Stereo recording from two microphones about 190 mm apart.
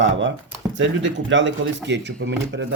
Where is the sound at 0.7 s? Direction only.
75° right (ahead or behind).